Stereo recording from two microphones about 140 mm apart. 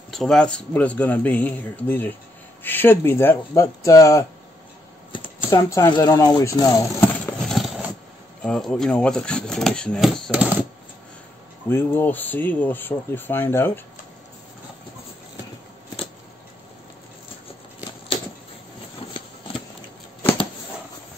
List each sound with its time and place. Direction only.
0.1 s speech: centre (ahead or behind); by 4.3 s 20° left (ahead or behind)
5.5 s speech: 20° left (ahead or behind)
7.4 s a sound: centre (ahead or behind)
8.4 s speech: 5° left (ahead or behind)
10.3 s typewriter: 10° right (ahead or behind)
11.7 s speech: 15° left (ahead or behind)